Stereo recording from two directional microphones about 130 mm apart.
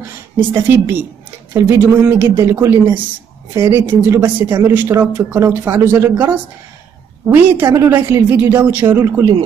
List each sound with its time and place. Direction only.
0.4 s speech: 15° right (ahead or behind)